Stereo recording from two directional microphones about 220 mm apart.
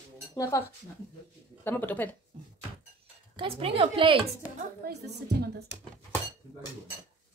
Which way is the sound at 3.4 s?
25° right (ahead or behind).